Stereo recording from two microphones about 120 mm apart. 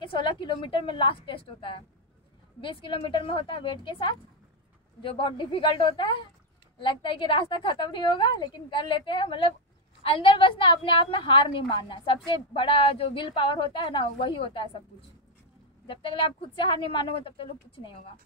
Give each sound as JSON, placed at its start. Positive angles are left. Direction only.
{"t": 0.0, "sound": "a woman's voice", "side_deg": 40}